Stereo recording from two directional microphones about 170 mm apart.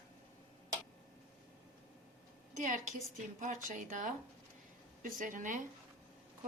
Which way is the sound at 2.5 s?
45° right (ahead or behind).